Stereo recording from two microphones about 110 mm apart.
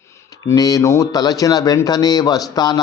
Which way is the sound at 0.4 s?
35° left (ahead or behind).